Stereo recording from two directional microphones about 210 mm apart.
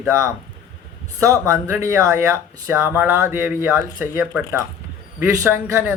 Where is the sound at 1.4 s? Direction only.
15° right (ahead or behind).